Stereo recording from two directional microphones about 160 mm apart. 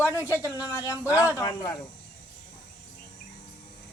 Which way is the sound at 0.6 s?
20° left (ahead or behind).